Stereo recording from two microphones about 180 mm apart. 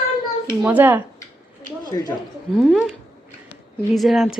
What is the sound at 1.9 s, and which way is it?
Speech, 20° left (ahead or behind).